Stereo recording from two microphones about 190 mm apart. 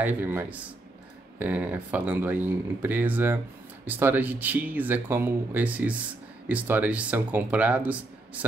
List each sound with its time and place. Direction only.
0.0 s speech: 10° right (ahead or behind)